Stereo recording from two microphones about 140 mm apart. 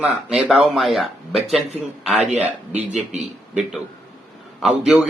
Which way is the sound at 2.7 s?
55° right (ahead or behind).